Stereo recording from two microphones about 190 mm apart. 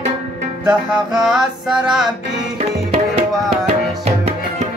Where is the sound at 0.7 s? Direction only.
5° right (ahead or behind).